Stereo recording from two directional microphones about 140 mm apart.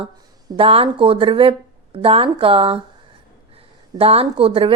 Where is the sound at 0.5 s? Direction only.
40° right (ahead or behind).